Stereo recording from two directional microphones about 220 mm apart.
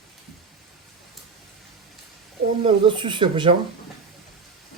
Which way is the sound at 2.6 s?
20° right (ahead or behind).